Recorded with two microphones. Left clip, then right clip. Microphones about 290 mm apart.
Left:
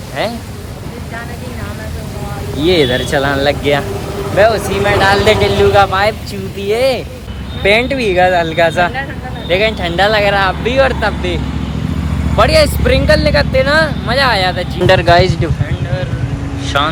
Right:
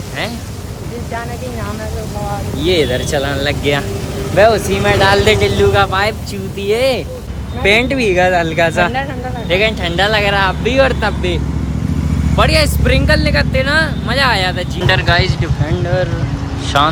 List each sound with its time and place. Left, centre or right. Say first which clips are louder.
2.6 s speech: left 3 dB; centre
3.6 s speech: left 2 dB; centre
12.4 s speech: left 4 dB; centre
16.7 s speech: right 2 dB; centre